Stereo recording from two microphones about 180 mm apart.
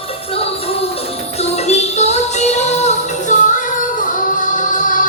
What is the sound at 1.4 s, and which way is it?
Music, 35° left (ahead or behind).